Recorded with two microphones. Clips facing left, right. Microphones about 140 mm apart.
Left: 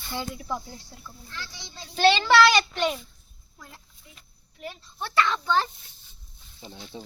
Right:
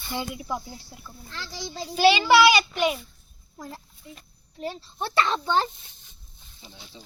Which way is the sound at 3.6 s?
40° right (ahead or behind).